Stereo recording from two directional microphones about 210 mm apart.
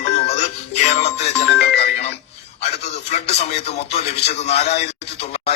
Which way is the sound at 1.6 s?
50° left (ahead or behind).